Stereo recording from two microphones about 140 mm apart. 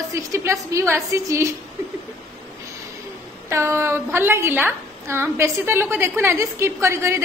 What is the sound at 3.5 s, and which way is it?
A woman's voice, 20° right (ahead or behind).